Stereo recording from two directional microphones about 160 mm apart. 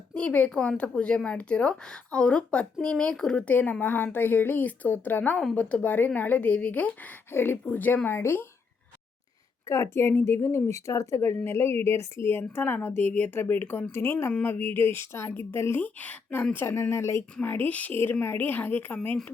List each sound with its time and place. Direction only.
0.1 s a woman's voice: 5° left (ahead or behind)
9.6 s a woman's voice: 20° left (ahead or behind)